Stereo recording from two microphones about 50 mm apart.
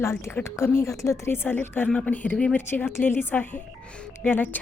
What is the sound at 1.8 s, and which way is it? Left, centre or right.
Speech, left.